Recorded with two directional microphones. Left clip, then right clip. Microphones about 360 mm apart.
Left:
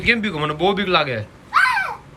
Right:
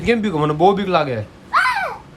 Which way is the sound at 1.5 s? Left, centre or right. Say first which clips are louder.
Even; right.